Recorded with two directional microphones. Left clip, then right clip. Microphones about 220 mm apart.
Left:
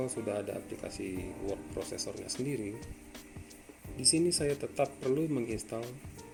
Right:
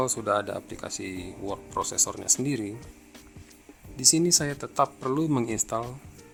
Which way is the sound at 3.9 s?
40° right (ahead or behind).